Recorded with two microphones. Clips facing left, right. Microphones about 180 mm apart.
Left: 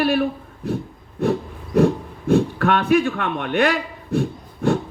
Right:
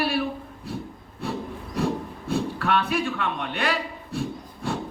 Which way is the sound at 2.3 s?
50° left (ahead or behind).